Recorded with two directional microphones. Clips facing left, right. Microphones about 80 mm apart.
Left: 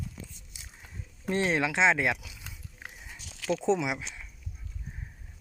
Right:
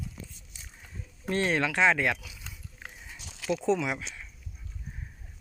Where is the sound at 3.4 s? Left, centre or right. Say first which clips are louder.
Even; centre.